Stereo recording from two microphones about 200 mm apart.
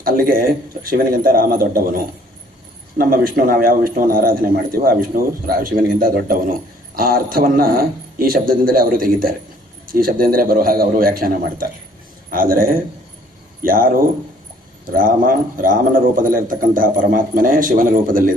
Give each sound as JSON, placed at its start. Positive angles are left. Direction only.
{"t": 0.0, "sound": "speech", "side_deg": -45}